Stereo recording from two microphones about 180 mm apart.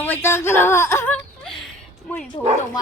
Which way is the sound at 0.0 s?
10° left (ahead or behind).